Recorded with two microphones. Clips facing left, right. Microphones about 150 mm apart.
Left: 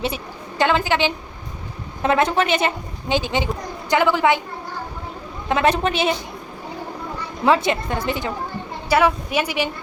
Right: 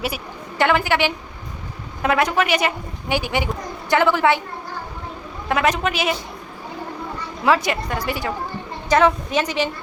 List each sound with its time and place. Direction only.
0.6 s a woman's voice: 20° left (ahead or behind)
5.5 s a woman's voice: 30° left (ahead or behind)
7.4 s a woman's voice: 25° left (ahead or behind)
8.9 s a woman's voice: 10° left (ahead or behind)